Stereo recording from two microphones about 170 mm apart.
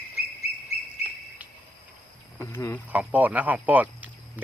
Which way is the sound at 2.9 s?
10° right (ahead or behind).